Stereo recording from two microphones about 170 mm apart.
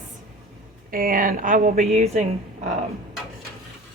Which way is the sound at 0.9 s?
55° right (ahead or behind).